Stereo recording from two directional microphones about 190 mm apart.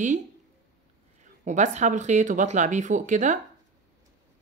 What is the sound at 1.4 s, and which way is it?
Speech, 40° right (ahead or behind).